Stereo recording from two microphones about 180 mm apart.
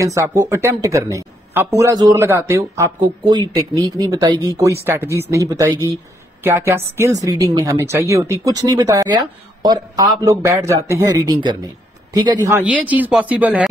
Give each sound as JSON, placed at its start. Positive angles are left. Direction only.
{"t": 0.0, "sound": "speech", "side_deg": -15}